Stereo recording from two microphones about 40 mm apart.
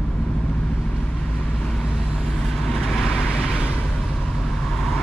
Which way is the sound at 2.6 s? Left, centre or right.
Centre.